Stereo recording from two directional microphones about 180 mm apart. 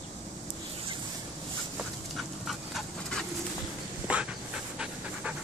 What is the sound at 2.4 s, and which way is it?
Dog, centre (ahead or behind).